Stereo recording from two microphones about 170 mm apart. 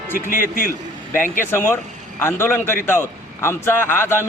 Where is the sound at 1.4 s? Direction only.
15° left (ahead or behind).